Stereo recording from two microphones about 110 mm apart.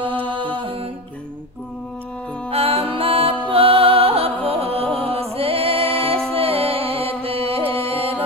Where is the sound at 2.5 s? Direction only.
60° right (ahead or behind).